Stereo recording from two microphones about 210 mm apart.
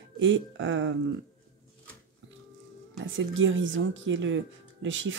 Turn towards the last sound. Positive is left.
turn(degrees=-65)  # may be behind; listen again after turning